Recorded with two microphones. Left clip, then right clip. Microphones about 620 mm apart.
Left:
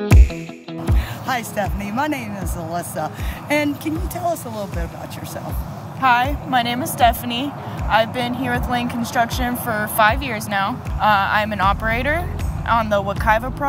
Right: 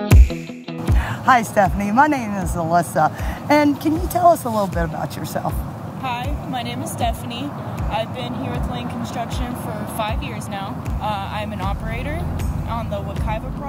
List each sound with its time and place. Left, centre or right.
1.2 s speech: right
6.0 s speech: left